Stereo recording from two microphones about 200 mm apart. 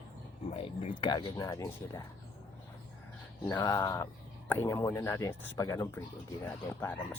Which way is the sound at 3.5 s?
15° left (ahead or behind).